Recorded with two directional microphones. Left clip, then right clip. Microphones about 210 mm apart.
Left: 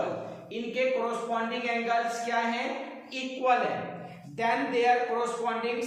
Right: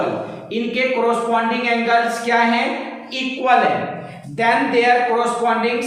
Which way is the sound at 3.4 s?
10° left (ahead or behind).